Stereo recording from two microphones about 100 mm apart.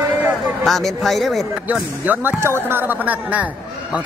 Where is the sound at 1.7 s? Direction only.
20° right (ahead or behind).